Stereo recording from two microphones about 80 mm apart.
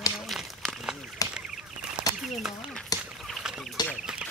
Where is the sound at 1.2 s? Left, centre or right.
Left.